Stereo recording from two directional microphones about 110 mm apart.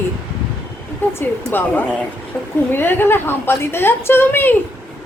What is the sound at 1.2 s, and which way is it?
A woman's voice, 20° left (ahead or behind).